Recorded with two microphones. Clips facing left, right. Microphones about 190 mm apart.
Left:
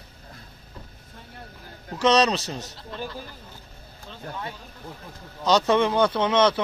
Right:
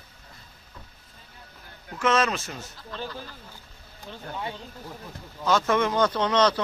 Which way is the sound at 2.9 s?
20° left (ahead or behind).